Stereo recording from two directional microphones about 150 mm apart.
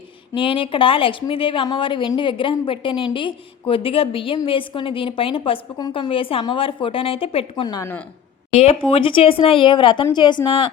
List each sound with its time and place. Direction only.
0.3 s a woman's voice: 35° left (ahead or behind)
8.9 s a woman's voice: 35° left (ahead or behind)